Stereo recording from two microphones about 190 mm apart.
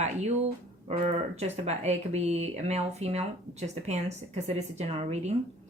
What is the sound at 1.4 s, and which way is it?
A woman's voice, 35° right (ahead or behind).